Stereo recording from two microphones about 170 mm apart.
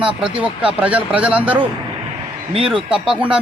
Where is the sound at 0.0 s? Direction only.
5° right (ahead or behind).